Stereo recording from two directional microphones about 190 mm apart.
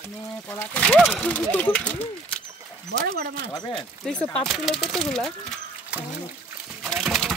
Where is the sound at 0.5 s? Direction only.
5° left (ahead or behind).